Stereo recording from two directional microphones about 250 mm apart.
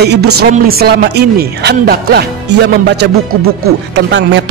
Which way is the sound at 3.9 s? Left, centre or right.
Right.